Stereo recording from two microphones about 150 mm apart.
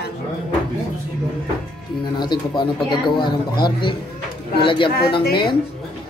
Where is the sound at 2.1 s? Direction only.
30° left (ahead or behind).